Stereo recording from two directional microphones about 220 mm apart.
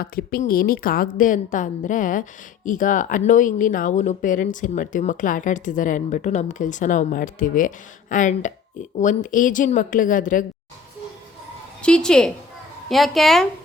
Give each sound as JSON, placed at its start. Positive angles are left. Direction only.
{"t": 0.0, "sound": "speech", "side_deg": 40}
{"t": 11.8, "sound": "speech", "side_deg": 5}